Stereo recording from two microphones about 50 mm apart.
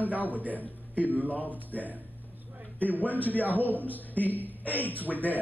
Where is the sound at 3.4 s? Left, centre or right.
Left.